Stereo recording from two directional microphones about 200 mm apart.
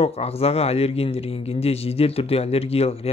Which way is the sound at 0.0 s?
30° left (ahead or behind).